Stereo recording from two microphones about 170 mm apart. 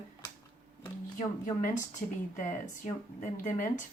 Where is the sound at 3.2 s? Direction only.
50° left (ahead or behind).